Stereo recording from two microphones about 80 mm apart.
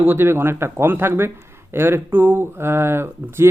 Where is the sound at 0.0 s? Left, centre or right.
Right.